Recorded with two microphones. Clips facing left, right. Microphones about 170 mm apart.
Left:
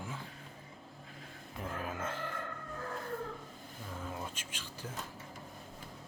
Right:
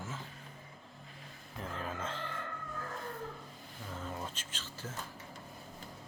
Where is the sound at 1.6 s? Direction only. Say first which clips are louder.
Left 1 dB; 10° left (ahead or behind).